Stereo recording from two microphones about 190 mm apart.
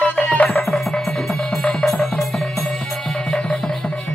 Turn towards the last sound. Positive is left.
turn(degrees=5)  # may be behind; listen again after turning